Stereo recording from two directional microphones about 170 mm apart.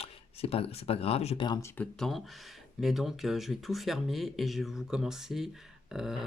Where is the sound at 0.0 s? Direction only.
35° left (ahead or behind).